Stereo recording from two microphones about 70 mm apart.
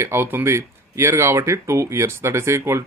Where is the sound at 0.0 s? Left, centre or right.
Right.